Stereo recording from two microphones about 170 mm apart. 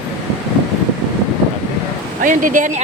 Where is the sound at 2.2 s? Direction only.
50° right (ahead or behind).